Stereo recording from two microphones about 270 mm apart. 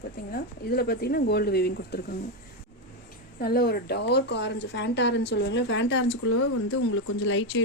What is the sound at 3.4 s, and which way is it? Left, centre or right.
Speech, left.